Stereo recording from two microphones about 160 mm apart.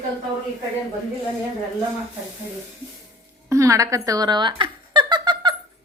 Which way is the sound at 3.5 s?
20° right (ahead or behind).